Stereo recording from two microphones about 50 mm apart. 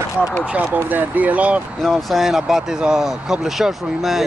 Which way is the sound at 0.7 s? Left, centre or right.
Right.